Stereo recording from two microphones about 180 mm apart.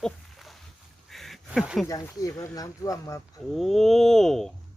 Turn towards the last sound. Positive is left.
turn(degrees=0)  # may be behind; listen again after turning